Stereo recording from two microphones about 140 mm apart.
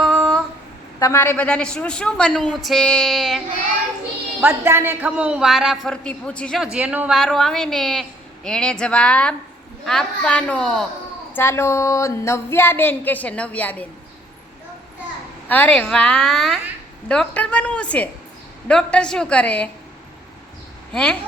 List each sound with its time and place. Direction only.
0.0 s a sound: centre (ahead or behind)
0.9 s speech: 20° left (ahead or behind); by 3.4 s centre (ahead or behind)
4.4 s a woman's voice: 15° right (ahead or behind)
7.2 s a woman's voice: centre (ahead or behind)
11.3 s speech: 20° left (ahead or behind)
15.4 s a woman's voice: 10° left (ahead or behind)
20.9 s a woman's voice: 5° left (ahead or behind)